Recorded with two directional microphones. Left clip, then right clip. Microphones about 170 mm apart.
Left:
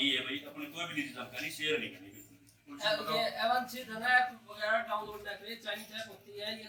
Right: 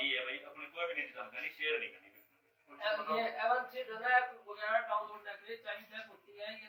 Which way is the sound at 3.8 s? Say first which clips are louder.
Left 2 dB; 45° left (ahead or behind).